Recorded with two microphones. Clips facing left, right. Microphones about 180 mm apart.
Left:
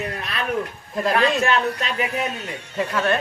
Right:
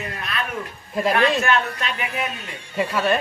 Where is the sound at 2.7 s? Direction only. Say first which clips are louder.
Right 1 dB; 10° right (ahead or behind).